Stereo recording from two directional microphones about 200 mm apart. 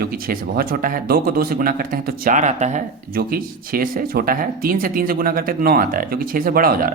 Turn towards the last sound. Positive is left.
turn(degrees=-45)  # may be behind; listen again after turning